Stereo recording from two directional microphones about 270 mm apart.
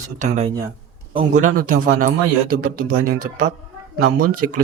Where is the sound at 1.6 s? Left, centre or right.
Right.